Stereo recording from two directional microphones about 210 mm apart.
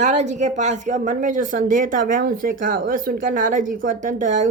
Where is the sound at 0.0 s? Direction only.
35° right (ahead or behind).